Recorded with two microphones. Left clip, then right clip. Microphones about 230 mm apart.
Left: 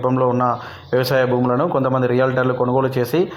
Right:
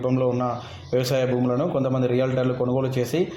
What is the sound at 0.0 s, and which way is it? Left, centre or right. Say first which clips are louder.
Speech: left 6 dB; centre.